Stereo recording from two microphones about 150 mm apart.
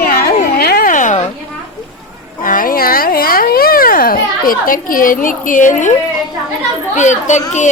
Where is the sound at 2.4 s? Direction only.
65° left (ahead or behind).